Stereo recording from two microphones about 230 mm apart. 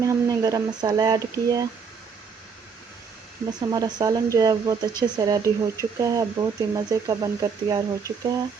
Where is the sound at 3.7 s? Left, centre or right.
Centre.